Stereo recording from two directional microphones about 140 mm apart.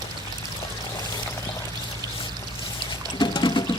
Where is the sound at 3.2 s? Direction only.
30° left (ahead or behind).